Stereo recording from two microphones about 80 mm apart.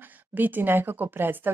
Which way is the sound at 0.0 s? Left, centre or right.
Right.